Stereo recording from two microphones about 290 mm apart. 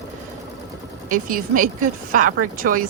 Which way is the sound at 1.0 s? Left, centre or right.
Right.